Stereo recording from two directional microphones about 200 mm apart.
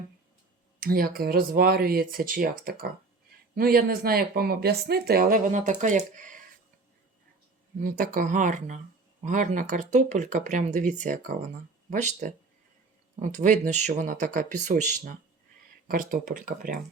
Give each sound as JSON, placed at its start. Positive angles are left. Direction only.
{"t": 0.8, "sound": "speech", "side_deg": -45}
{"t": 7.8, "sound": "speech", "side_deg": -45}